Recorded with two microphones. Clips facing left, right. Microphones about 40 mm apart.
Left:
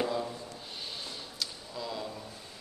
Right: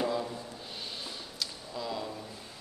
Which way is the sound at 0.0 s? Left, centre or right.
Centre.